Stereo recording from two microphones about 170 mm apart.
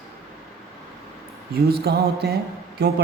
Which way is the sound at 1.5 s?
65° right (ahead or behind).